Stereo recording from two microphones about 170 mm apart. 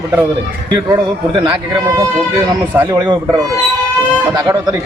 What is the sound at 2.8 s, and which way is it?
Speech, 25° right (ahead or behind).